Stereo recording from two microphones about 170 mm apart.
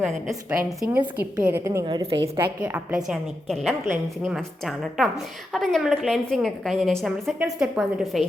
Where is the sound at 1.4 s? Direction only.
10° right (ahead or behind).